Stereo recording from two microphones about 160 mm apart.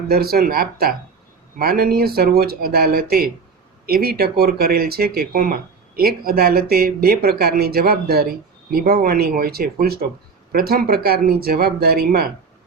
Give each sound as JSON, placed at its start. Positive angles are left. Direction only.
{"t": 0.1, "sound": "speech", "side_deg": -70}